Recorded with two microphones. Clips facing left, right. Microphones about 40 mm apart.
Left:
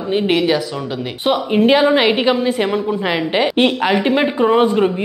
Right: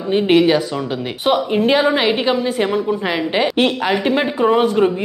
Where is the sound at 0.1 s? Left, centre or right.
Centre.